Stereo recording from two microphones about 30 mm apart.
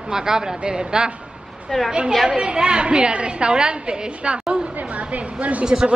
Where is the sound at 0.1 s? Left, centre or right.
Right.